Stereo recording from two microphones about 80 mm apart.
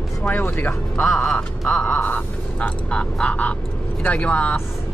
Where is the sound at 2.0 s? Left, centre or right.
Centre.